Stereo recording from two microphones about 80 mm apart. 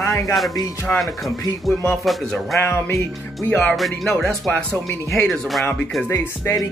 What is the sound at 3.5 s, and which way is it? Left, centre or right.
Speech, centre.